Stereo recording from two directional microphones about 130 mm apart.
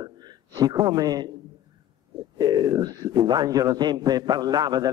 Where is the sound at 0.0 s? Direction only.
30° right (ahead or behind).